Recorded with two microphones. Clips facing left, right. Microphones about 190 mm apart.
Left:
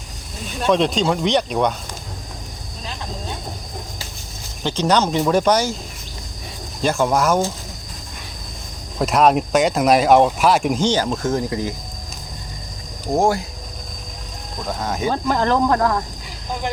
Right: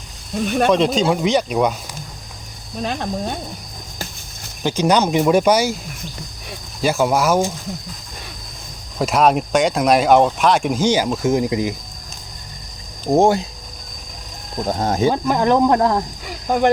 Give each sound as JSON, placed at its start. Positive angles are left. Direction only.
{"t": 0.4, "sound": "speech", "side_deg": -60}
{"t": 0.7, "sound": "speech", "side_deg": 0}
{"t": 2.8, "sound": "speech", "side_deg": -60}
{"t": 4.6, "sound": "speech", "side_deg": -10}
{"t": 6.8, "sound": "speech", "side_deg": -5}
{"t": 9.0, "sound": "speech", "side_deg": 0}
{"t": 10.8, "sound": "speech", "side_deg": -10}
{"t": 13.1, "sound": "speech", "side_deg": -20}
{"t": 14.7, "sound": "speech", "side_deg": -35}
{"t": 15.1, "sound": "speech", "side_deg": -15}
{"t": 16.5, "sound": "speech", "side_deg": -60}